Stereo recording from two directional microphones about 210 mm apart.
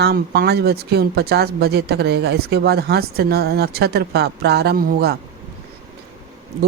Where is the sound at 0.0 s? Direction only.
50° right (ahead or behind).